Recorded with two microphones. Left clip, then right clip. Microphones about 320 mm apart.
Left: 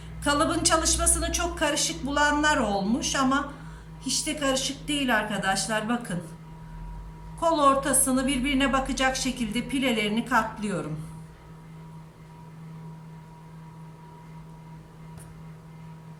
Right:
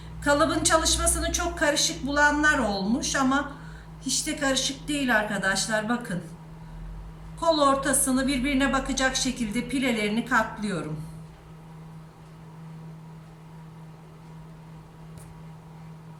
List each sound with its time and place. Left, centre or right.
0.2 s a woman's voice: centre
7.3 s a woman's voice: centre